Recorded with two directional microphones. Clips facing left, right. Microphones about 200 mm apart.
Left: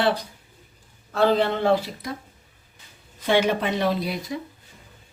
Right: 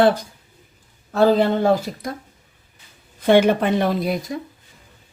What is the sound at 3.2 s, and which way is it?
Speech, 50° right (ahead or behind).